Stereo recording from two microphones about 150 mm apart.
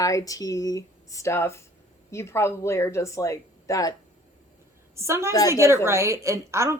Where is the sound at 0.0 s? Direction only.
25° left (ahead or behind).